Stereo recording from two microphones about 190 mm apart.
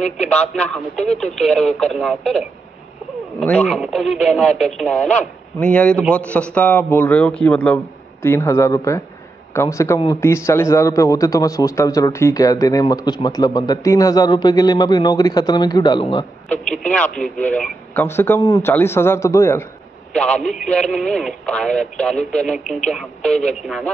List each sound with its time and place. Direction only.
0.2 s speech: 5° left (ahead or behind)
3.3 s a man's voice: centre (ahead or behind); by 16.3 s 25° left (ahead or behind)
16.4 s a man's voice: 5° left (ahead or behind)